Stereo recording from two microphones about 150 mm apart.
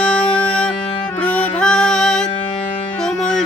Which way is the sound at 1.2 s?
10° left (ahead or behind).